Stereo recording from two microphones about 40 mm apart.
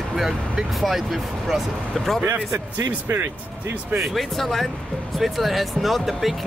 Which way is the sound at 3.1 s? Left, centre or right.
Right.